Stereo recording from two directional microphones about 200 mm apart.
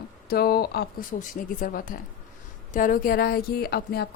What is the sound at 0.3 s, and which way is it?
Speech, 50° left (ahead or behind).